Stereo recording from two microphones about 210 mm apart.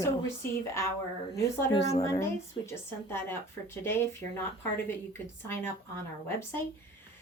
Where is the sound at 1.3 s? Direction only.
15° left (ahead or behind).